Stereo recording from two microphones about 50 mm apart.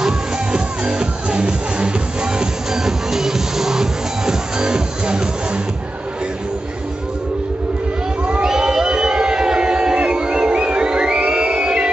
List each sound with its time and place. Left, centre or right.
0.0 s music: centre
8.3 s a sound: centre
11.1 s music: right